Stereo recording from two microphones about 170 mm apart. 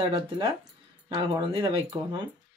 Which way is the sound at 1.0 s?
30° right (ahead or behind).